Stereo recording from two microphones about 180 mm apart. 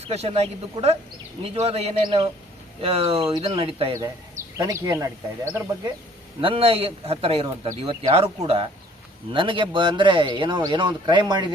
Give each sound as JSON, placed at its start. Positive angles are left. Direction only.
{"t": 0.0, "sound": "speech", "side_deg": -35}
{"t": 4.5, "sound": "speech", "side_deg": -15}
{"t": 6.4, "sound": "speech", "side_deg": -30}